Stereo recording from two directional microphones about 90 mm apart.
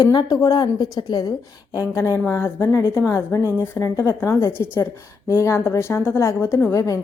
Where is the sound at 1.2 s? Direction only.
40° left (ahead or behind).